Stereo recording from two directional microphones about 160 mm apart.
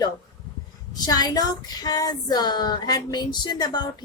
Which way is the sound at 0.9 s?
25° left (ahead or behind).